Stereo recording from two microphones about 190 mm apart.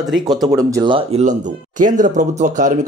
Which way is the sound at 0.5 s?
20° right (ahead or behind).